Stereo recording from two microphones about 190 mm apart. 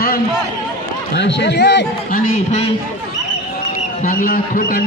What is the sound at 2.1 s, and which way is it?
Speech, 45° left (ahead or behind).